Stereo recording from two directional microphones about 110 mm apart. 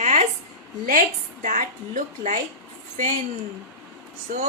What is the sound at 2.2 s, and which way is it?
A woman's voice, 90° right.